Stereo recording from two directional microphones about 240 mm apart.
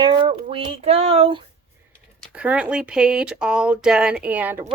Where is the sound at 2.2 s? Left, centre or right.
Centre.